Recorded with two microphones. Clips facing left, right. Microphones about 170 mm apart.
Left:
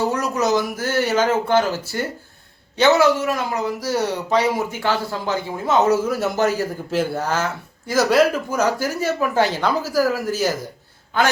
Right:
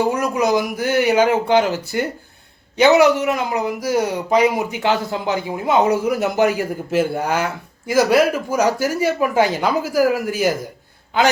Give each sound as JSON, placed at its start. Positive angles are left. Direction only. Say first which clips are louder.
{"t": 0.1, "sound": "speech", "louder": "right 2 dB", "side_deg": -10}